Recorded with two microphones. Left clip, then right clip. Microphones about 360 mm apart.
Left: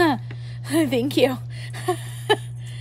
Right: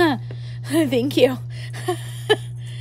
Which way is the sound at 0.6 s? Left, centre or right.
Centre.